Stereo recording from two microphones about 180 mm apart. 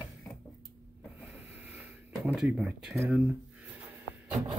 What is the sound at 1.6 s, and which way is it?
Wheeze, 10° right (ahead or behind).